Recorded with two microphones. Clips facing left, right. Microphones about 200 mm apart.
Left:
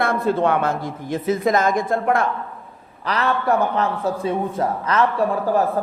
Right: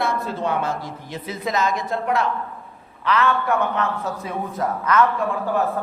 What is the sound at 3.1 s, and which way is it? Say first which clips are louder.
A man's voice: even; 35° left (ahead or behind).